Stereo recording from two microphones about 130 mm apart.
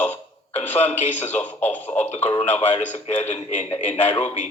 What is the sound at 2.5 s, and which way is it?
A man's voice, 55° left (ahead or behind).